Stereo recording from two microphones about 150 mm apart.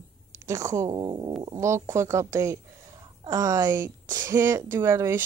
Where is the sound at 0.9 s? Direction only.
30° right (ahead or behind).